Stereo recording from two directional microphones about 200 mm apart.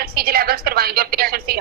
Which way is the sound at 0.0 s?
50° right (ahead or behind).